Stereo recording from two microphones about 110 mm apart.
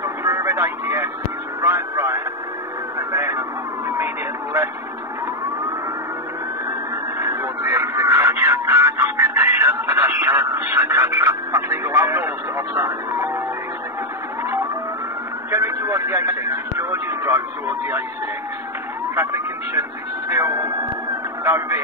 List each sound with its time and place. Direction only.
0.0 s vehicle: 25° right (ahead or behind)
1.6 s speech: 25° right (ahead or behind)
3.0 s vehicle: 25° right (ahead or behind)
7.2 s a sound: 25° right (ahead or behind)
15.5 s vehicle: 25° right (ahead or behind)
19.7 s speech: 25° right (ahead or behind)